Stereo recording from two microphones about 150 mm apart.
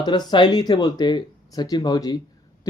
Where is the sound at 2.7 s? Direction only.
20° left (ahead or behind).